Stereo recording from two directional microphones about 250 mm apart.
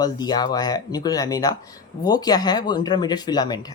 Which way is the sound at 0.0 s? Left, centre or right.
Centre.